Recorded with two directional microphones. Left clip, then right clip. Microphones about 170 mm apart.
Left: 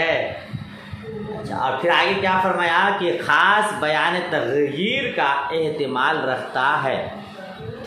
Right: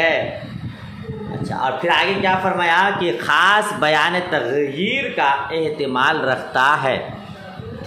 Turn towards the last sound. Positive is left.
turn(degrees=-30)  # may be behind; listen again after turning